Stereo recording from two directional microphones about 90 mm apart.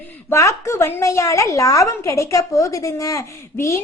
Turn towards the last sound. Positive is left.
turn(degrees=35)  # may be behind; listen again after turning